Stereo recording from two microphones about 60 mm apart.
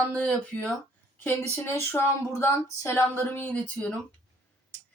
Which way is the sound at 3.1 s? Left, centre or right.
Left.